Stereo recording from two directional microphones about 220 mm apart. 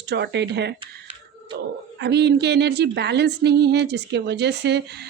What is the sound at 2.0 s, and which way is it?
Speech, 50° right (ahead or behind).